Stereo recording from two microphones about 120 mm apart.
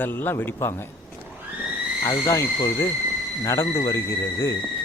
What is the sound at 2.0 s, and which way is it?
Speech, 30° left (ahead or behind).